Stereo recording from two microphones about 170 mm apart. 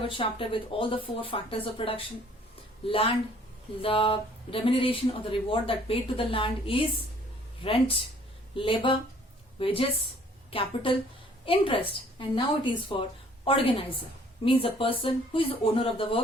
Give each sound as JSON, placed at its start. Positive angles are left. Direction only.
{"t": 0.1, "sound": "a woman's voice", "side_deg": 30}